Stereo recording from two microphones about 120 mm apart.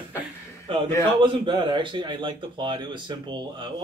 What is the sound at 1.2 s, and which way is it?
A man's voice, 45° right (ahead or behind).